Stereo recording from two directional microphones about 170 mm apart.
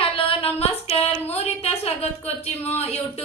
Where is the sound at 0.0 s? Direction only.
35° left (ahead or behind).